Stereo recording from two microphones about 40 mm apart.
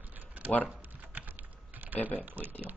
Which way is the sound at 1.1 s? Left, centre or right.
Right.